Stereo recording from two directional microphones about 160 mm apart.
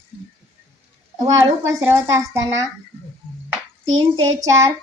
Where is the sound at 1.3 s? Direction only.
15° right (ahead or behind).